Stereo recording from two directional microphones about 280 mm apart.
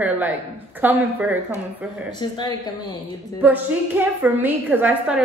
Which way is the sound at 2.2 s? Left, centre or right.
Centre.